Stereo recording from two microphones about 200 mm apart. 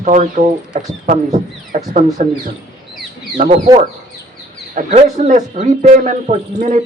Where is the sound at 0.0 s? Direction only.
40° right (ahead or behind).